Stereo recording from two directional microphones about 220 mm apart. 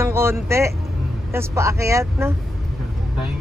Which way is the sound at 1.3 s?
15° right (ahead or behind).